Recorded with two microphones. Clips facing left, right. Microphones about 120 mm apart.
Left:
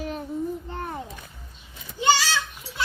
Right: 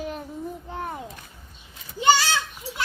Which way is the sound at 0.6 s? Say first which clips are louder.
Even; 10° right (ahead or behind).